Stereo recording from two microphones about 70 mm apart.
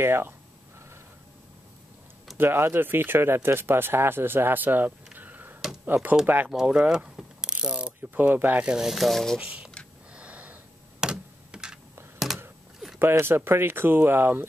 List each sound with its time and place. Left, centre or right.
0.0 s speech: right
2.3 s speech: right
6.5 s mechanisms: centre
8.1 s speech: right
8.6 s speech: centre
9.4 s speech: centre
10.1 s computer keyboard: centre
12.3 s a sound: centre
13.2 s speech: right